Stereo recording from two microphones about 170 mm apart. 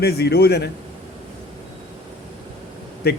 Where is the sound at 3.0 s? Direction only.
70° left (ahead or behind).